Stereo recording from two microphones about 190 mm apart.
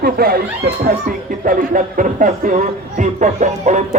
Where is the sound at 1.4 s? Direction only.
45° right (ahead or behind).